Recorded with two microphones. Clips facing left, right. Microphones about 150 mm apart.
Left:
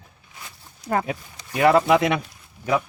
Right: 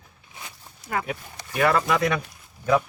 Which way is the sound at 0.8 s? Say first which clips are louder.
Left 5 dB; 30° left (ahead or behind).